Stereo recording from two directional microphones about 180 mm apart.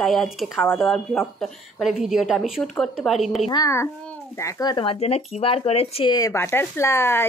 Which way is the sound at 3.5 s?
20° left (ahead or behind).